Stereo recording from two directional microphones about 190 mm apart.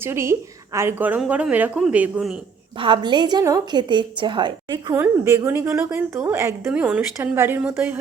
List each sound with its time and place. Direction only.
0.0 s a woman's voice: 15° right (ahead or behind)
2.7 s a woman's voice: 25° right (ahead or behind)
5.0 s a woman's voice: 10° right (ahead or behind)